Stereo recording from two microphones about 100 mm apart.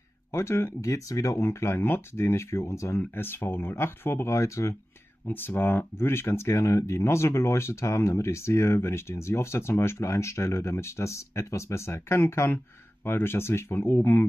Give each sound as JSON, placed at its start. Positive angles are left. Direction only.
{"t": 0.3, "sound": "speech", "side_deg": 25}